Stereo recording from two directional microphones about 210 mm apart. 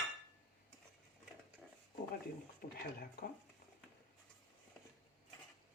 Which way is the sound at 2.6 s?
45° left (ahead or behind).